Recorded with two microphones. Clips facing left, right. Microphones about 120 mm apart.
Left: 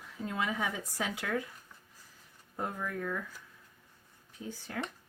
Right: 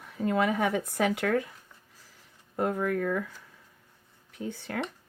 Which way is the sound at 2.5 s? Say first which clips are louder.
Right 9 dB; 70° right (ahead or behind).